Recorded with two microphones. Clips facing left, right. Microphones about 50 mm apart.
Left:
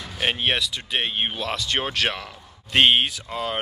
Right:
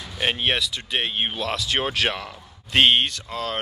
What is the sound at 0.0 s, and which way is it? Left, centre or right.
Speech, centre.